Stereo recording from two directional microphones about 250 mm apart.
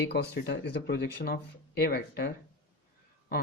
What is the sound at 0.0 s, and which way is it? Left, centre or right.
Speech, left.